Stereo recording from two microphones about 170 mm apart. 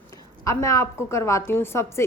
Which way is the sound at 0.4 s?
20° left (ahead or behind).